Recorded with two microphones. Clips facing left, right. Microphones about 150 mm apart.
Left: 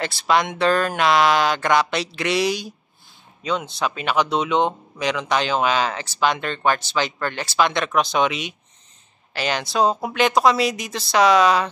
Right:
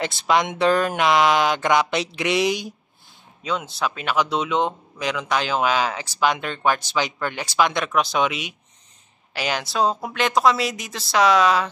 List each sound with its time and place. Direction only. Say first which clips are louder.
0.0 s speech: even; 20° right (ahead or behind)
3.4 s speech: left 2 dB; 5° right (ahead or behind)